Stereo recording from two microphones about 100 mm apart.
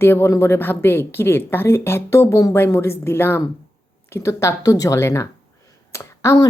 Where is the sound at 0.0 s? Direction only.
25° left (ahead or behind).